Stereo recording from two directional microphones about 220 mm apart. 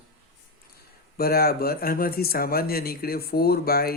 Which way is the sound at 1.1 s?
45° left (ahead or behind).